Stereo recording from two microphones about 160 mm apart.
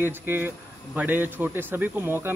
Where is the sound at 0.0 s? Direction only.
15° right (ahead or behind).